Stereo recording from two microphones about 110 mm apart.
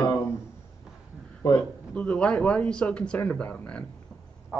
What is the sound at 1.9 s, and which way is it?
Speech, 10° left (ahead or behind).